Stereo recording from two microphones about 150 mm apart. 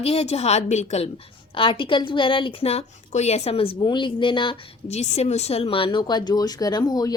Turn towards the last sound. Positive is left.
turn(degrees=25)  # may be behind; listen again after turning